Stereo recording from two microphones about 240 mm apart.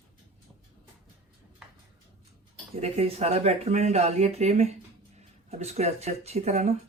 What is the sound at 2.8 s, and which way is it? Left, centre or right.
Speech, right.